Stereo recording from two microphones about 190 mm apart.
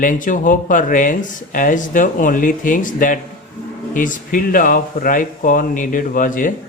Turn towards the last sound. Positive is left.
turn(degrees=45)  # may be behind; listen again after turning